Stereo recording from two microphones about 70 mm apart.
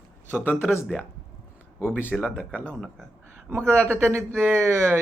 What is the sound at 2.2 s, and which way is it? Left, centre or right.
Speech, centre.